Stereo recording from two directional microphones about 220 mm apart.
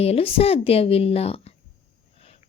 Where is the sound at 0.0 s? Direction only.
25° left (ahead or behind).